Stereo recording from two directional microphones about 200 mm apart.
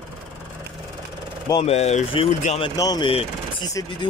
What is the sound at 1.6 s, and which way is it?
Speech, 30° left (ahead or behind).